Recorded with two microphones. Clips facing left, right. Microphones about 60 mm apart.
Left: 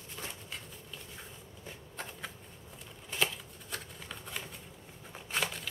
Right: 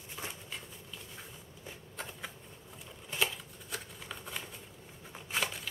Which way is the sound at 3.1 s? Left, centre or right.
Centre.